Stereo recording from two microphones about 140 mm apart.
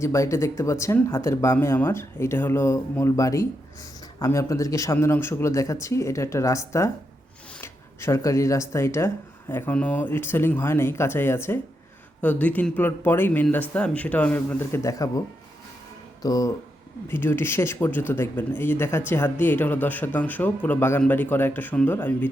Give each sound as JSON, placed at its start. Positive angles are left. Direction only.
{"t": 0.0, "sound": "speech", "side_deg": 20}
{"t": 16.2, "sound": "speech", "side_deg": 25}